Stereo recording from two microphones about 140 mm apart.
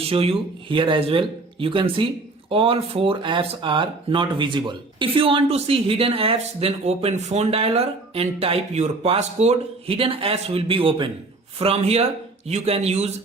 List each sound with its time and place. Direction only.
0.0 s speech: 45° right (ahead or behind)